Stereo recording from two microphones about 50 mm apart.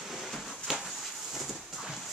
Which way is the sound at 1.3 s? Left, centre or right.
Centre.